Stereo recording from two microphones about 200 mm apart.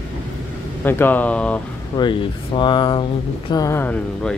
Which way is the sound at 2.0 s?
25° left (ahead or behind).